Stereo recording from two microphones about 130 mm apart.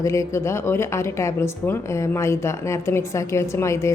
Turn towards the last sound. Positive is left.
turn(degrees=20)  # may be behind; listen again after turning